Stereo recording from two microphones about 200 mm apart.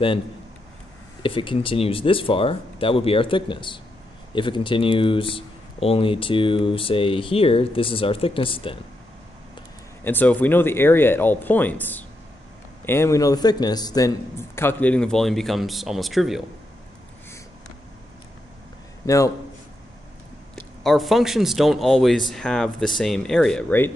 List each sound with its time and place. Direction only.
1.2 s speech: 25° left (ahead or behind)
10.0 s a man's voice: 10° left (ahead or behind)
19.0 s a man's voice: 15° left (ahead or behind)
20.8 s speech: centre (ahead or behind)